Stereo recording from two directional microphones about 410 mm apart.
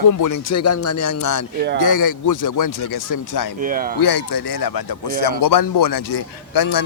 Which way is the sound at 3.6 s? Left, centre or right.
Centre.